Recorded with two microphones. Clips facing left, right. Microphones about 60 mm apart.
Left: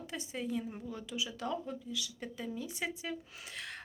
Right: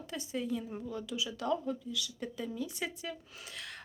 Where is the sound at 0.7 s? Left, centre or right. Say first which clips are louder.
Right 2 dB; centre.